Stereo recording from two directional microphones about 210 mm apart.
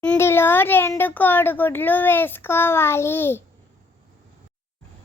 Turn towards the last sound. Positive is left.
turn(degrees=10)  # may be behind; listen again after turning